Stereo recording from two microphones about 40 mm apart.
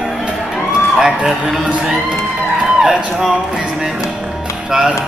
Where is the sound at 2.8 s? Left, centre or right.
Centre.